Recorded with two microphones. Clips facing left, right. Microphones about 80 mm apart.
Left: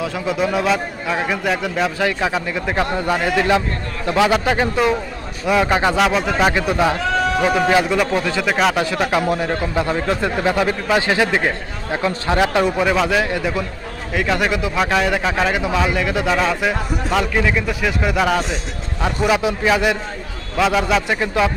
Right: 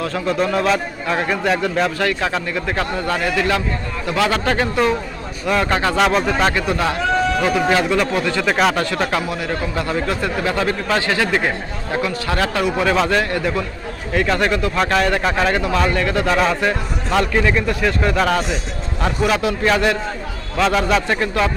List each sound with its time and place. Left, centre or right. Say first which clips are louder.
0.0 s a man's voice: right 1 dB; centre
6.0 s a man's voice: even; centre
6.5 s a man's voice: left 2 dB; centre
8.4 s a man's voice: right 1 dB; centre
9.0 s a man's voice: left 3 dB; centre
13.0 s a man's voice: even; centre
14.1 s a man's voice: right 1 dB; centre